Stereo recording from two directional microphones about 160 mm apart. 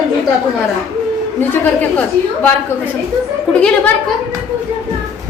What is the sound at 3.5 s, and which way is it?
Speech, 5° left (ahead or behind).